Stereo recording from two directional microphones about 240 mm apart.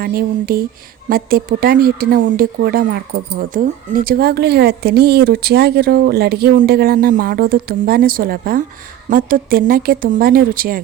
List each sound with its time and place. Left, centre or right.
0.0 s speech: right